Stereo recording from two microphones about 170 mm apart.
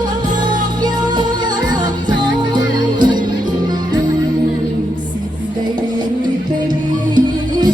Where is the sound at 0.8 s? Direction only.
25° right (ahead or behind).